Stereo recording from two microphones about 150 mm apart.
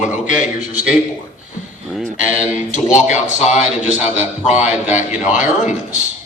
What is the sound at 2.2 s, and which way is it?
Speech, 55° left (ahead or behind).